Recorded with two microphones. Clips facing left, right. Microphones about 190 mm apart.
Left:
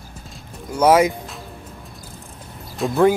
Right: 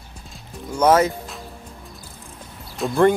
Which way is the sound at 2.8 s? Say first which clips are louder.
Left 1 dB; 5° left (ahead or behind).